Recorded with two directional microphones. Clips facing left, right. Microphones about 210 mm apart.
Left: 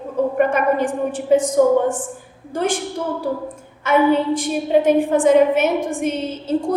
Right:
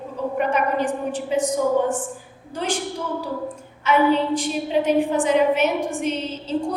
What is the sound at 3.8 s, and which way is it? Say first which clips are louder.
A woman's voice: left 3 dB; 50° left (ahead or behind).